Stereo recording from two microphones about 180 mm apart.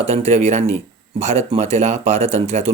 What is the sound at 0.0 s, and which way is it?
Speech, 35° right (ahead or behind).